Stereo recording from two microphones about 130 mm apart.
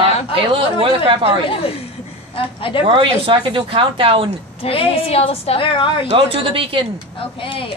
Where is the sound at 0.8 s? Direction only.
45° right (ahead or behind).